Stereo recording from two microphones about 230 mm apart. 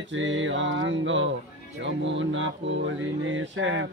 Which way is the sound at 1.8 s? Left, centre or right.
Right.